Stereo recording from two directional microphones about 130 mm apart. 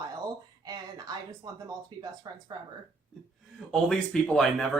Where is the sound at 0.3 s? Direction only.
30° right (ahead or behind).